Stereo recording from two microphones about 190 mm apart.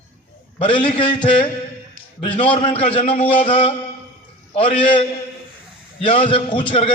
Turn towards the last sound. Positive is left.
turn(degrees=30)  # may be behind; listen again after turning